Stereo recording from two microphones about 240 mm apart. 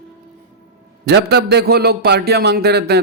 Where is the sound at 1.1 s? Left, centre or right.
Right.